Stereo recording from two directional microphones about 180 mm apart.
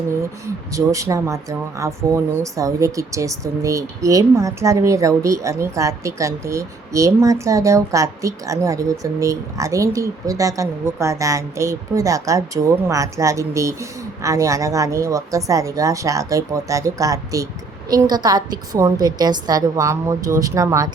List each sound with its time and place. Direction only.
0.2 s a woman's voice: 15° right (ahead or behind)